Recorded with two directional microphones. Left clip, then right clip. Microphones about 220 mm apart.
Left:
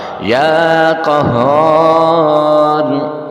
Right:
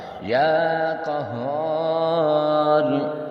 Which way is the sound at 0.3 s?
40° left (ahead or behind).